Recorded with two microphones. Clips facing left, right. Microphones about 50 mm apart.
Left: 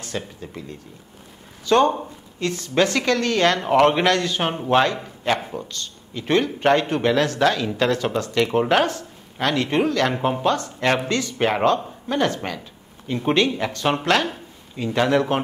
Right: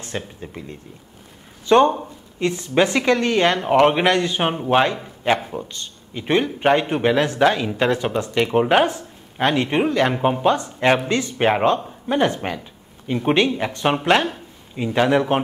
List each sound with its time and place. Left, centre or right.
0.0 s speech: right
1.7 s a man's voice: right